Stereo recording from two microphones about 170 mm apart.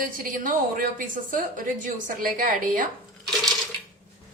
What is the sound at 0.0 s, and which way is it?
A woman's voice, 50° right (ahead or behind).